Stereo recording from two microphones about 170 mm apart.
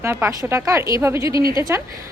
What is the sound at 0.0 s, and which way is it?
A woman's voice, 15° right (ahead or behind).